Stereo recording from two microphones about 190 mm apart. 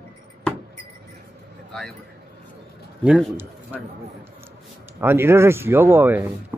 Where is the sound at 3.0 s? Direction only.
10° right (ahead or behind).